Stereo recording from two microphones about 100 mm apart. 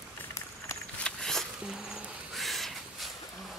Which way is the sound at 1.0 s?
5° left (ahead or behind).